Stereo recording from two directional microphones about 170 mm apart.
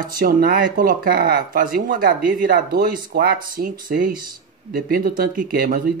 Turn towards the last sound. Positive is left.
turn(degrees=-60)  # may be behind; listen again after turning